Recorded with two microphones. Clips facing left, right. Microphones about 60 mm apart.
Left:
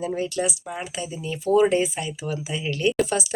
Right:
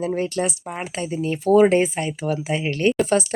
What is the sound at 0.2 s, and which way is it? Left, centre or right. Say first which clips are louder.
Speech: right 2 dB; right.